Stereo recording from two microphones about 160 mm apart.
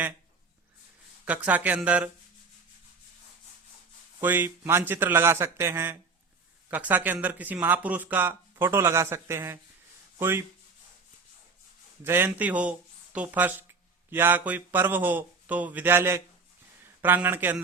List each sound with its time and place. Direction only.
1.2 s speech: 10° right (ahead or behind)
4.2 s speech: 10° right (ahead or behind)
12.0 s speech: 15° right (ahead or behind)